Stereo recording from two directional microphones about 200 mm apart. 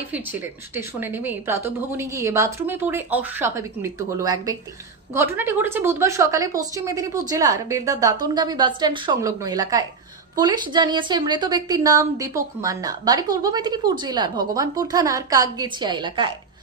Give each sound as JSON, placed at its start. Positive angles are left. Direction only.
{"t": 0.1, "sound": "a woman's voice", "side_deg": -10}